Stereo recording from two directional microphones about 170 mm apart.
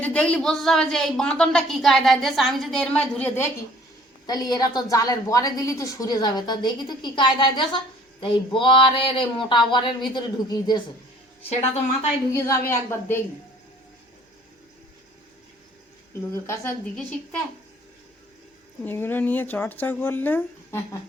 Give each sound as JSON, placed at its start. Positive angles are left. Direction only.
{"t": 0.0, "sound": "a woman's voice", "side_deg": 5}
{"t": 4.3, "sound": "a woman's voice", "side_deg": 25}
{"t": 11.4, "sound": "a woman's voice", "side_deg": 40}
{"t": 12.3, "sound": "speech", "side_deg": 15}
{"t": 16.3, "sound": "speech", "side_deg": 15}
{"t": 16.9, "sound": "a woman's voice", "side_deg": 5}
{"t": 18.9, "sound": "speech", "side_deg": 10}